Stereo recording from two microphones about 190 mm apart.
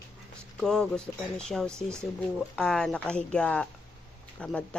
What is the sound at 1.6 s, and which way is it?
Speech, 15° right (ahead or behind).